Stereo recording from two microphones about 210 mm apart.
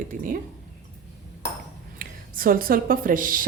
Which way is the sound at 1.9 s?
45° right (ahead or behind).